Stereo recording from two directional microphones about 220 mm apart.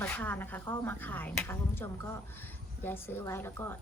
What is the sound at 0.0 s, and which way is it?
A woman's voice, 10° left (ahead or behind).